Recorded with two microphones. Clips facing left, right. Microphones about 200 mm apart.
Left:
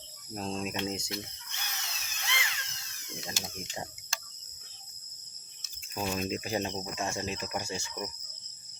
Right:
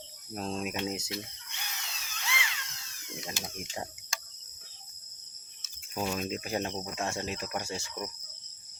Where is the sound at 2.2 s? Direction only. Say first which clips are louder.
Right 1 dB; 40° left (ahead or behind).